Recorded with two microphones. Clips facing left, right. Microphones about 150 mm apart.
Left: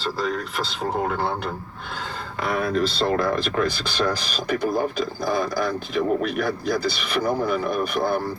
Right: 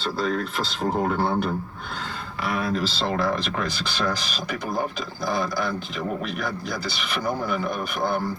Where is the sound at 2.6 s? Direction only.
50° left (ahead or behind).